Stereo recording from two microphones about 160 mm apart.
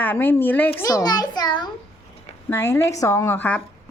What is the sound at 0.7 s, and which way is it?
Child singing, 20° left (ahead or behind).